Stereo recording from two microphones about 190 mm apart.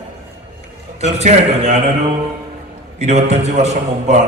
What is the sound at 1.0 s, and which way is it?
A man's voice, 35° right (ahead or behind).